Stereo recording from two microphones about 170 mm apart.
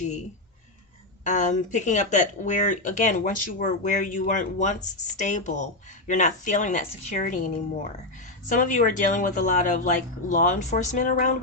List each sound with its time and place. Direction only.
1.2 s speech: 45° left (ahead or behind)